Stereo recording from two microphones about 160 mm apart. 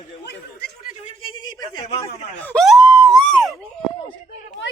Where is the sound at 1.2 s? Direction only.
25° left (ahead or behind).